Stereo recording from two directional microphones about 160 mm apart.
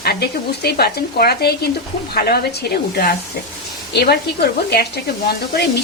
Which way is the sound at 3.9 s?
90° left.